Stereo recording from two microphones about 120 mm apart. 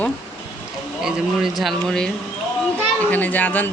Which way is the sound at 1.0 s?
5° right (ahead or behind).